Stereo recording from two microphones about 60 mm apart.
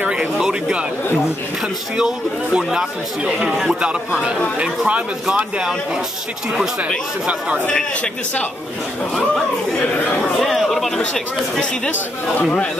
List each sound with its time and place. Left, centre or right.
0.0 s speech: centre
2.0 s speech: centre
4.6 s speech: right
5.2 s speech: centre
7.2 s speech: centre
7.6 s a man's voice: left
10.4 s chatter: centre
12.4 s a man's voice: left